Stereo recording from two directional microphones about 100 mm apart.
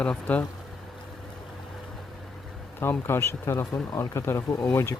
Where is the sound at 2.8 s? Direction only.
25° left (ahead or behind).